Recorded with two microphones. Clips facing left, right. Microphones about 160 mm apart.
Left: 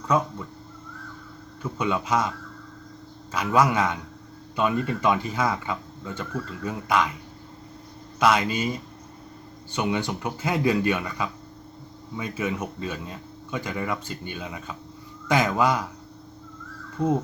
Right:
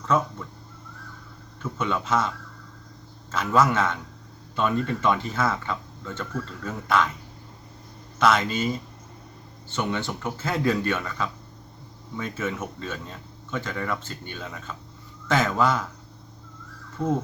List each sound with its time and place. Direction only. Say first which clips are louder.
1.8 s speech: left 1 dB; 10° left (ahead or behind)
3.3 s speech: even; 15° left (ahead or behind)
8.2 s speech: even; 10° left (ahead or behind)
9.7 s speech: left 2 dB; 15° left (ahead or behind)
17.0 s speech: left 2 dB; 15° left (ahead or behind)